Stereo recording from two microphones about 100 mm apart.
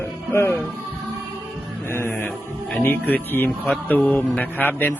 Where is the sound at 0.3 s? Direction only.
20° left (ahead or behind).